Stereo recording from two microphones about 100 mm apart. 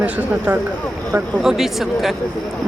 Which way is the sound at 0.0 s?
15° right (ahead or behind).